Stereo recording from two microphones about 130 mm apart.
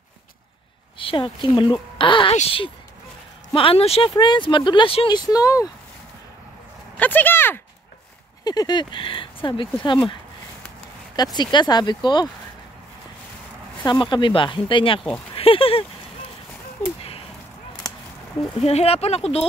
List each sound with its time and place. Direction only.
0.9 s a woman's voice: 40° left (ahead or behind)
3.5 s speech: 45° left (ahead or behind); by 5.7 s 25° left (ahead or behind)
7.0 s speech: 15° left (ahead or behind)
8.5 s speech: 30° left (ahead or behind)
11.3 s speech: 35° left (ahead or behind)
13.8 s speech: 35° left (ahead or behind)
15.3 s a sound: 45° left (ahead or behind)
18.6 s speech: 55° left (ahead or behind)